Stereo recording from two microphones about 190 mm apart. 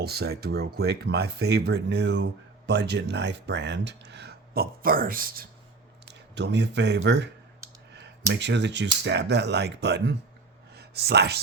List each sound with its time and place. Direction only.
0.0 s speech: 55° right (ahead or behind)
6.3 s speech: 65° right (ahead or behind)
10.8 s a sound: 60° right (ahead or behind)